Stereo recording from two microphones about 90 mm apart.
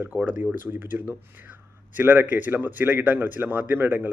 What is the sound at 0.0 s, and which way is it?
Speech, 15° right (ahead or behind).